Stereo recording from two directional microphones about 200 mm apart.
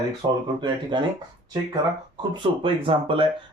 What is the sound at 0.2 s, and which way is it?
Speech, 25° right (ahead or behind).